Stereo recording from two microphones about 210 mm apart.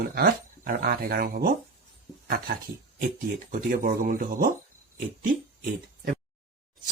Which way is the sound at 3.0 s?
40° right (ahead or behind).